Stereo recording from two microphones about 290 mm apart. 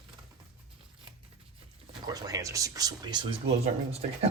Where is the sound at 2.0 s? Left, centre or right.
Centre.